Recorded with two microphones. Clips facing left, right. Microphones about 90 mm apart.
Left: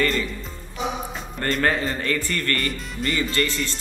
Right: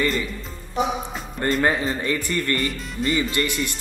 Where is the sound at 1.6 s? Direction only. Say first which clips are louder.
Left 1 dB; 15° right (ahead or behind).